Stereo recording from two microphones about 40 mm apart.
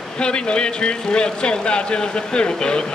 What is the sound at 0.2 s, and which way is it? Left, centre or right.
Speech, left.